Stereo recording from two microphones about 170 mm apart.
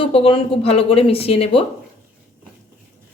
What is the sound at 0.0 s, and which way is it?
Speech, 30° left (ahead or behind).